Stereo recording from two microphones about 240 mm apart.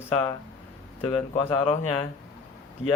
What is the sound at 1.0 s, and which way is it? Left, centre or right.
Speech, left.